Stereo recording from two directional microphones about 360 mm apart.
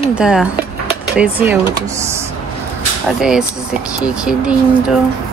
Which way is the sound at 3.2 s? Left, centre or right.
Centre.